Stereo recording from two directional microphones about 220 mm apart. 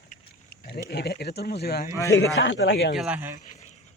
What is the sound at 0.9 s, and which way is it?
Speech, 45° left (ahead or behind).